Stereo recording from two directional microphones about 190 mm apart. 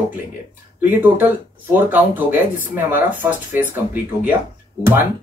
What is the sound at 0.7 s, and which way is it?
Speech, 10° right (ahead or behind).